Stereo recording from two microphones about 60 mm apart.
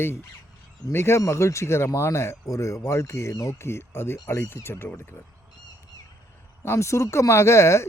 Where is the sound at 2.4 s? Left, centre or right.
Left.